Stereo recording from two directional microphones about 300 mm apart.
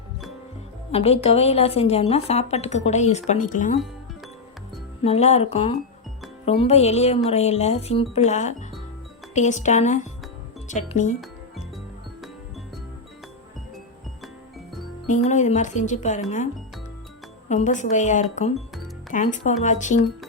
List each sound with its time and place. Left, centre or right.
0.9 s a woman's voice: centre
5.0 s a woman's voice: left
15.0 s a woman's voice: left
17.5 s a woman's voice: left